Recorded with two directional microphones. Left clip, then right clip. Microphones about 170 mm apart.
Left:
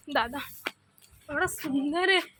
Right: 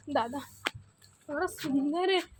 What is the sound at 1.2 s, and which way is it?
A woman's voice, 15° left (ahead or behind).